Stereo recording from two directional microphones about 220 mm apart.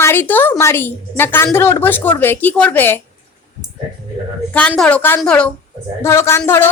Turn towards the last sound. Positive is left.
turn(degrees=10)  # may be behind; listen again after turning